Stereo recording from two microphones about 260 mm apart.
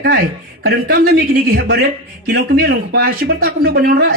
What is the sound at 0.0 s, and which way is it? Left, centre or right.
A man's voice, right.